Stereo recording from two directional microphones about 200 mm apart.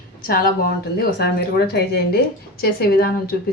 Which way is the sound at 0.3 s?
45° left (ahead or behind).